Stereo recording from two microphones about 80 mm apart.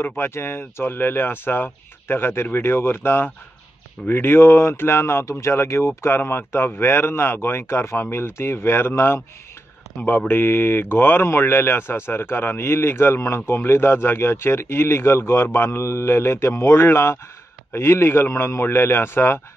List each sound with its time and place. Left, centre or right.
0.2 s speech: left